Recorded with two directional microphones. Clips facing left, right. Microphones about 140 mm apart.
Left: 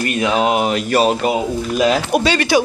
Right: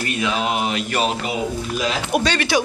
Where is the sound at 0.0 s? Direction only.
50° left (ahead or behind).